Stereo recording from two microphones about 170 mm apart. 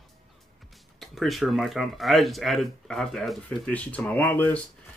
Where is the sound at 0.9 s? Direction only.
Centre (ahead or behind).